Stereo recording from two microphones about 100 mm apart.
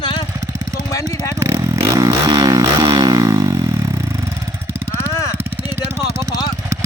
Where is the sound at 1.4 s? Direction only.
35° right (ahead or behind).